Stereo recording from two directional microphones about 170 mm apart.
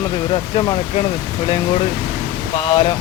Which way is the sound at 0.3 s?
30° left (ahead or behind).